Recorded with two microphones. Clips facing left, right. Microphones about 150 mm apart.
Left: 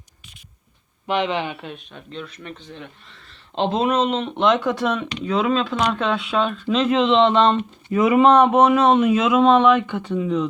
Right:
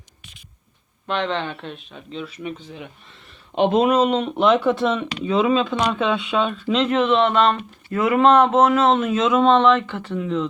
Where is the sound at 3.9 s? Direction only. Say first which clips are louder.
Right 2 dB; 10° right (ahead or behind).